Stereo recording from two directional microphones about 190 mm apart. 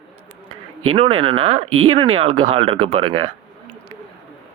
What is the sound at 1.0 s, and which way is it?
Speech, 30° right (ahead or behind).